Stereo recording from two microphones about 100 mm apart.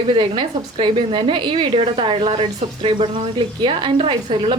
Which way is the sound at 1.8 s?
65° right (ahead or behind).